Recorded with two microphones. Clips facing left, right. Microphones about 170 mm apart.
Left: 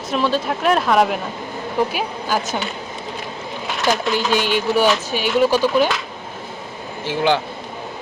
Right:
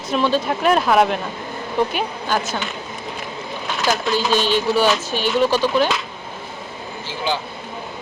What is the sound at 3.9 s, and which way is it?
Speech, 15° left (ahead or behind).